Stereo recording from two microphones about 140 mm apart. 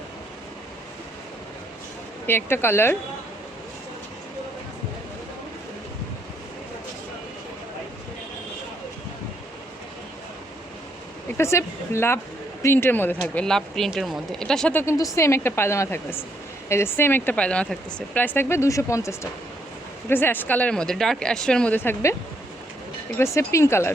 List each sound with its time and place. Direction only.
2.2 s speech: 15° left (ahead or behind)
11.3 s speech: 20° left (ahead or behind)
23.1 s speech: 20° left (ahead or behind)